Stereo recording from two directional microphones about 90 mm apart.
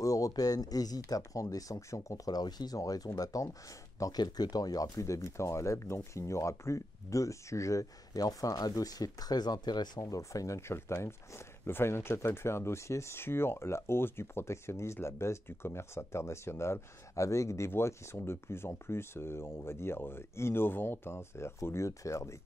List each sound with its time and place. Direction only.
0.0 s speech: 40° left (ahead or behind)